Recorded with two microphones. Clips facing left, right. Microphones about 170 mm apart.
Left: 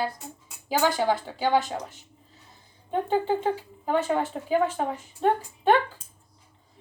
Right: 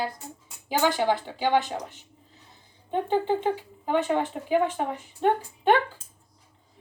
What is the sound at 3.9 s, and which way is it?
Speech, 15° right (ahead or behind).